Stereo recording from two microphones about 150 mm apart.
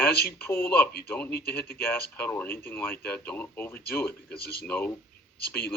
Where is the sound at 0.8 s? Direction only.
90° left.